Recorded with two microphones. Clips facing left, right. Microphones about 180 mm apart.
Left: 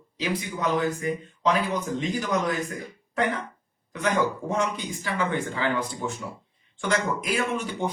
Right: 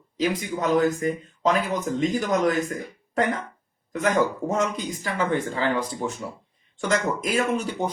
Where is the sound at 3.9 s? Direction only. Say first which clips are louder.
Right 3 dB; 40° right (ahead or behind).